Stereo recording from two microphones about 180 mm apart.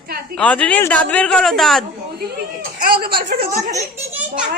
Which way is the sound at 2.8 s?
55° right (ahead or behind).